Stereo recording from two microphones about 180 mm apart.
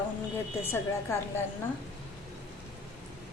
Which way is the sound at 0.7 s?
15° left (ahead or behind).